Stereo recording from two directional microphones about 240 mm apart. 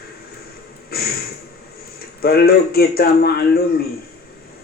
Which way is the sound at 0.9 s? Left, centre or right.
Left.